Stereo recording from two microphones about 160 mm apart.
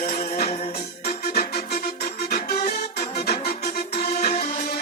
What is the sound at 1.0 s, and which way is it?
Music, 70° left (ahead or behind).